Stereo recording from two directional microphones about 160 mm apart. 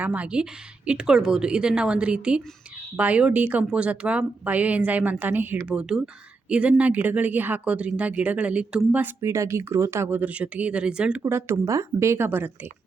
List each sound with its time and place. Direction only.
0.0 s a woman's voice: 10° right (ahead or behind)